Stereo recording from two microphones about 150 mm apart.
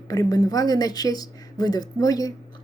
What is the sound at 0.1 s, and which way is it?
A woman's voice, 25° left (ahead or behind).